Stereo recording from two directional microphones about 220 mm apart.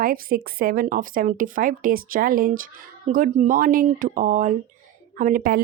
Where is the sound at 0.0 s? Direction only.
40° right (ahead or behind).